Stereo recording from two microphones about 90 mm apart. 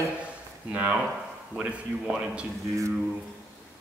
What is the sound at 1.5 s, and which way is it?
Speech, 15° right (ahead or behind).